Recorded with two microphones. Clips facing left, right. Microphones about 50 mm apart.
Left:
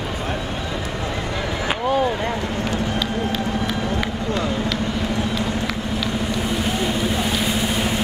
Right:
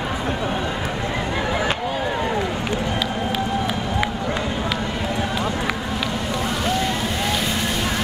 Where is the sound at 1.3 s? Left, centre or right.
Right.